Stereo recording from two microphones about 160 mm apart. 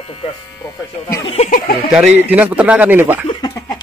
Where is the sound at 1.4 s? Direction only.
60° left (ahead or behind).